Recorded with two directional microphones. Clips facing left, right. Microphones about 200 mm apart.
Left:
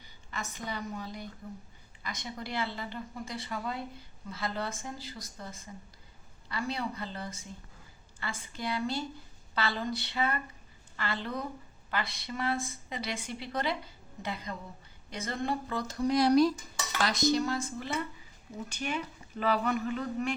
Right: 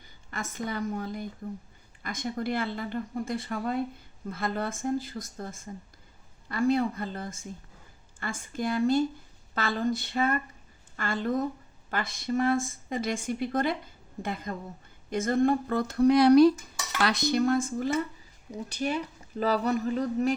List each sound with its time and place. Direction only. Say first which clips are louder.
0.0 s a woman's voice: right 3 dB; 50° right (ahead or behind)
18.7 s speech: right 6 dB; 35° right (ahead or behind)